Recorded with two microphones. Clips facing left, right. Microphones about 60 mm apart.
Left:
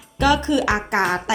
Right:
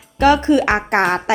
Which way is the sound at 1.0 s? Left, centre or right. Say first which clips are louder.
Right 4 dB; right.